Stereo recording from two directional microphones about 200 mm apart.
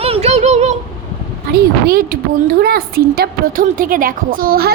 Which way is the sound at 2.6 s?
50° right (ahead or behind).